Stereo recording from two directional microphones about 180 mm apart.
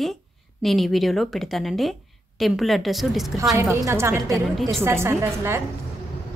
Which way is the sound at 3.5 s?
15° right (ahead or behind).